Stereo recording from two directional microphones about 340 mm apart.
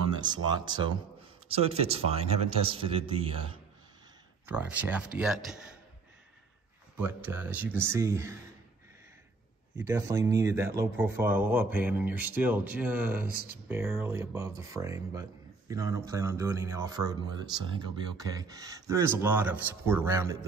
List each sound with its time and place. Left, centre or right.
0.2 s speech: centre
4.5 s speech: centre
7.0 s speech: centre
9.8 s speech: centre